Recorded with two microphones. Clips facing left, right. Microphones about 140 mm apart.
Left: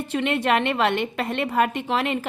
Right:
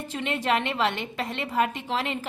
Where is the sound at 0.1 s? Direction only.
70° left (ahead or behind).